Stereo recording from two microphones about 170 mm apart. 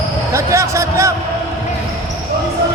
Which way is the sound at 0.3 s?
15° right (ahead or behind).